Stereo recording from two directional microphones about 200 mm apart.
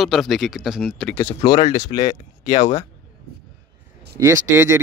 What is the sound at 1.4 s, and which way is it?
Speech, 20° left (ahead or behind).